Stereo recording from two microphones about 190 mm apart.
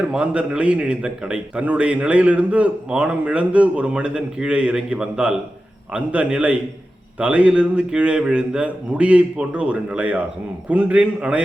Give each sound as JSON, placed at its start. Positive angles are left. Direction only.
{"t": 0.1, "sound": "a man's voice", "side_deg": -5}